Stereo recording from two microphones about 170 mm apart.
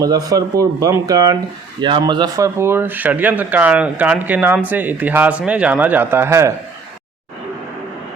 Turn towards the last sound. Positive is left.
turn(degrees=-15)  # may be behind; listen again after turning